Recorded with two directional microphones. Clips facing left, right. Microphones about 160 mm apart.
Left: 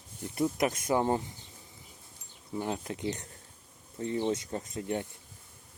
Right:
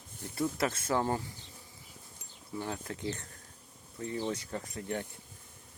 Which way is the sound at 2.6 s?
20° left (ahead or behind).